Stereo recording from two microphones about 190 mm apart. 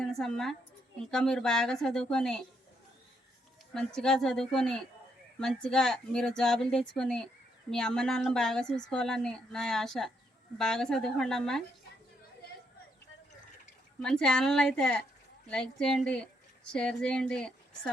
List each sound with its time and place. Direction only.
0.0 s a woman's voice: centre (ahead or behind)
3.8 s speech: 5° left (ahead or behind)
14.0 s speech: 5° left (ahead or behind)